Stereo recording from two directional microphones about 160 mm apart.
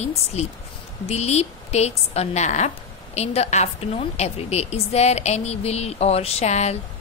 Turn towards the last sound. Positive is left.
turn(degrees=45)  # may be behind; listen again after turning